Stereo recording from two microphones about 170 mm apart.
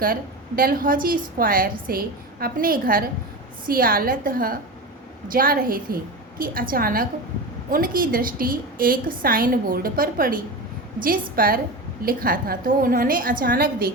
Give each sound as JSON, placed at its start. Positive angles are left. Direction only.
{"t": 0.0, "sound": "a woman's voice", "side_deg": -60}